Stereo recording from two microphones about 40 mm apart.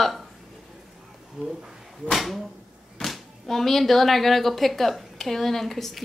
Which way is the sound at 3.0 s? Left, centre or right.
Left.